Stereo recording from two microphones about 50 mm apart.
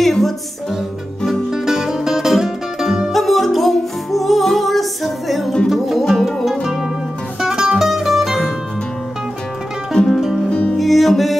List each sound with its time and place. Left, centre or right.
0.0 s music: centre
1.5 s music: centre
3.1 s music: centre
9.9 s music: centre
10.5 s music: left
10.8 s music: centre